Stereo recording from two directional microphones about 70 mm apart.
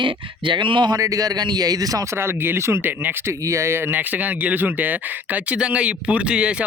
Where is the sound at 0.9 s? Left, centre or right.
Right.